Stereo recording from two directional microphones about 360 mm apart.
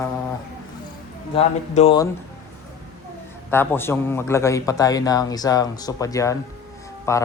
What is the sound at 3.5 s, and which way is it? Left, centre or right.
A man's voice, centre.